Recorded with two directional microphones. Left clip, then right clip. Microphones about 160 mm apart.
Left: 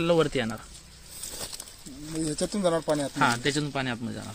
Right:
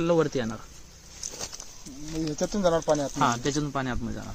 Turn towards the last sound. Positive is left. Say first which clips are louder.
# even
turn(degrees=5)  # may be behind; listen again after turning